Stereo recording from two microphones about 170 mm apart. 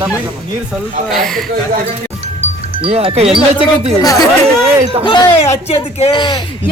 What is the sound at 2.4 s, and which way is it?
Music, 35° right (ahead or behind).